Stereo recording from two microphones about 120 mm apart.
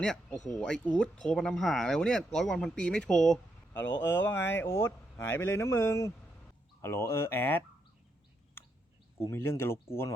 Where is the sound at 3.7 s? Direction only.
20° left (ahead or behind).